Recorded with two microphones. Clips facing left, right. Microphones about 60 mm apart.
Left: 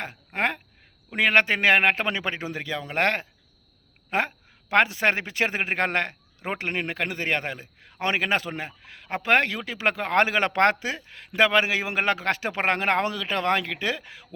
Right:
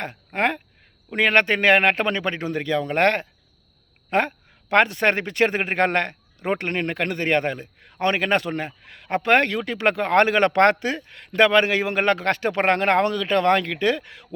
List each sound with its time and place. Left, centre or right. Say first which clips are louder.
0.0 s a man's voice: right 3 dB; centre